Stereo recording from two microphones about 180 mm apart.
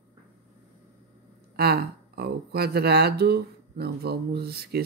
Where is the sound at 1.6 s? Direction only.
60° right (ahead or behind).